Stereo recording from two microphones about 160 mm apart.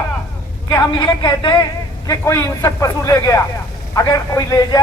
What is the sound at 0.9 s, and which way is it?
Speech, 30° left (ahead or behind).